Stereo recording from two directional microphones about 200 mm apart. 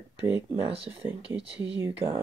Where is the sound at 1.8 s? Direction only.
10° right (ahead or behind).